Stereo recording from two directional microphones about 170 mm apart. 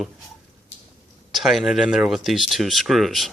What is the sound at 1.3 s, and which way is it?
Speech, centre (ahead or behind).